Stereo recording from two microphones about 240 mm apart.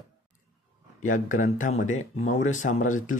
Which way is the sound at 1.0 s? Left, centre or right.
Left.